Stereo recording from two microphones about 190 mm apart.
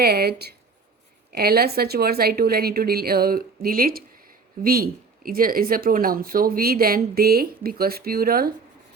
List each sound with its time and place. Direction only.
0.0 s speech: 55° right (ahead or behind)